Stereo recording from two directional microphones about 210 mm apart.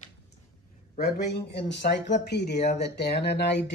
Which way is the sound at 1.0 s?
55° left (ahead or behind).